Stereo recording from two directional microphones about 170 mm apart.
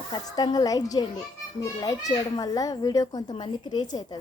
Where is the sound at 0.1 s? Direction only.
25° left (ahead or behind).